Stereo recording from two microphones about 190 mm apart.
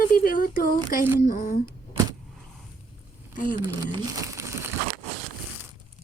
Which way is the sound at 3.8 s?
15° right (ahead or behind).